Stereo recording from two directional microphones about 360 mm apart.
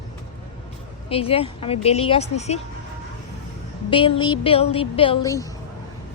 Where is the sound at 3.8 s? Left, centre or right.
Centre.